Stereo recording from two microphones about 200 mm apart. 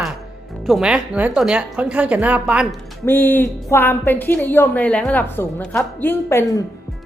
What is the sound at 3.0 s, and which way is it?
A woman's voice, 10° left (ahead or behind).